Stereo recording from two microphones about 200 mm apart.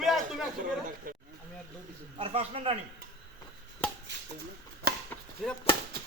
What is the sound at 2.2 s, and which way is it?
Speech, 30° right (ahead or behind).